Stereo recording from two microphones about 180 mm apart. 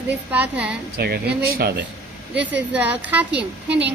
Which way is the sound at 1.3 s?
10° right (ahead or behind).